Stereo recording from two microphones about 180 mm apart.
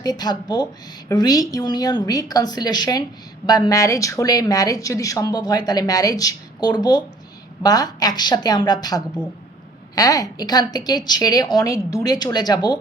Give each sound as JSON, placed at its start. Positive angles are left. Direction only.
{"t": 0.0, "sound": "a woman's voice", "side_deg": 20}